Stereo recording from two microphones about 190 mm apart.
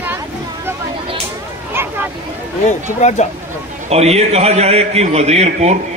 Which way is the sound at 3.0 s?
35° left (ahead or behind).